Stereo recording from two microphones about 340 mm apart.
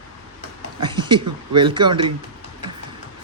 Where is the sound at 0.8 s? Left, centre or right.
Centre.